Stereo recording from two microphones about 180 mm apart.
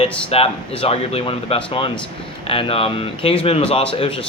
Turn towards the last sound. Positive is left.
turn(degrees=30)  # may be behind; listen again after turning